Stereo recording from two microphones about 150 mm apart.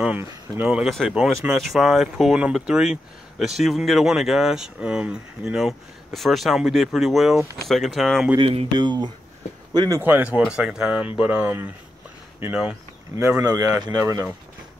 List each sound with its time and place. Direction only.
0.0 s speech: 10° right (ahead or behind)
8.4 s speech: 35° right (ahead or behind); by 11.7 s 10° right (ahead or behind)
13.4 s speech: 20° right (ahead or behind)